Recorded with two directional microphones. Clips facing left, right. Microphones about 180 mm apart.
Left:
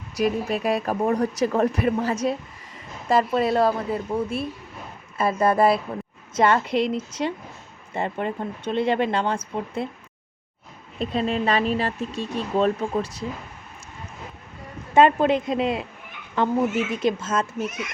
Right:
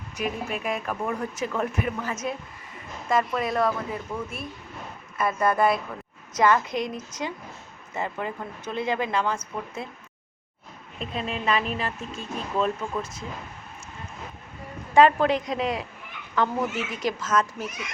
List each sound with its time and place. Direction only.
0.2 s a woman's voice: 35° left (ahead or behind)
11.0 s speech: 35° left (ahead or behind)
14.9 s a woman's voice: 25° left (ahead or behind)
17.0 s a woman's voice: 25° left (ahead or behind)